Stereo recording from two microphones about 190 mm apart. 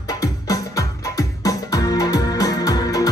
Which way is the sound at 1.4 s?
20° left (ahead or behind).